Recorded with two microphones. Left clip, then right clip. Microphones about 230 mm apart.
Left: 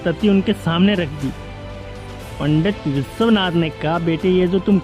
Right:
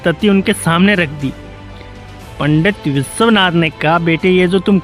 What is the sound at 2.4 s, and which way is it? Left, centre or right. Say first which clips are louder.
Speech: right 6 dB; right.